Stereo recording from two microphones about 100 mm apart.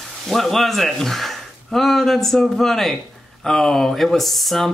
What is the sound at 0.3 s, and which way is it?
Speech, centre (ahead or behind).